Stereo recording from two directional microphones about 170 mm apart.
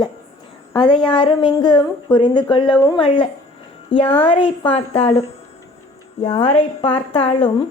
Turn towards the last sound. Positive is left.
turn(degrees=30)  # may be behind; listen again after turning